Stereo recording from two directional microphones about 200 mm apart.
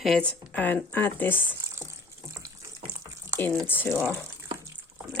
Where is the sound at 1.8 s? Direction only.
15° right (ahead or behind).